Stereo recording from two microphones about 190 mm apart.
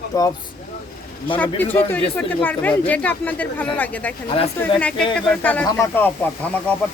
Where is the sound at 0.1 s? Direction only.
20° left (ahead or behind).